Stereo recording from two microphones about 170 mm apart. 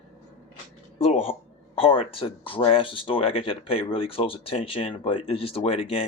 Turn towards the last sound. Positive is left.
turn(degrees=35)  # may be behind; listen again after turning